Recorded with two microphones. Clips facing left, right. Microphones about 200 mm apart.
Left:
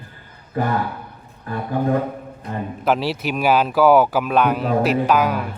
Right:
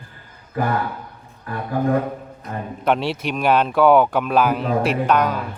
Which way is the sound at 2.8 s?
Centre (ahead or behind).